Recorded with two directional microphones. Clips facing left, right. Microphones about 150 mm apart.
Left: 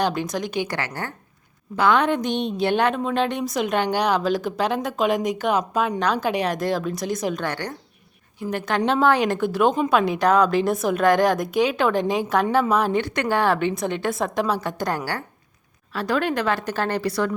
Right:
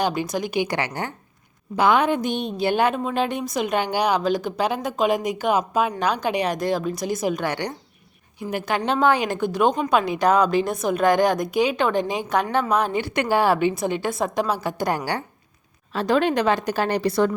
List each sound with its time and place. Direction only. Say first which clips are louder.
0.0 s a woman's voice: even; centre (ahead or behind)
13.0 s a woman's voice: right 1 dB; 10° right (ahead or behind)